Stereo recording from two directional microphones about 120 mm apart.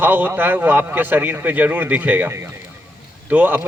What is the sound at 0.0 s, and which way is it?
Speech, 15° right (ahead or behind).